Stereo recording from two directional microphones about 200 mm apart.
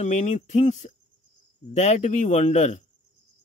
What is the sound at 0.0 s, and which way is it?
Speech, 35° left (ahead or behind).